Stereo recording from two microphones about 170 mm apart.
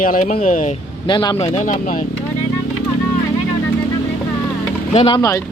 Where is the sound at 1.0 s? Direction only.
25° left (ahead or behind).